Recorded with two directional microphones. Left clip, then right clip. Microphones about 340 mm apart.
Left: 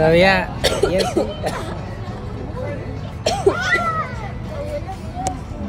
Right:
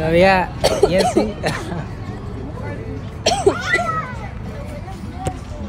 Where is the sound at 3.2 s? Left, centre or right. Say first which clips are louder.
Right 2 dB; right.